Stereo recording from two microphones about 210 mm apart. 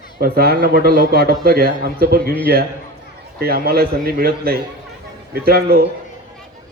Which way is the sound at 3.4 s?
45° right (ahead or behind).